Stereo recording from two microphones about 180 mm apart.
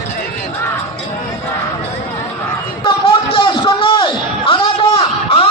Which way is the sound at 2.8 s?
30° left (ahead or behind).